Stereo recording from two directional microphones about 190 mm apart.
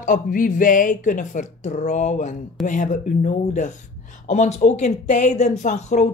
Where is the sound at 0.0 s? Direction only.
45° left (ahead or behind).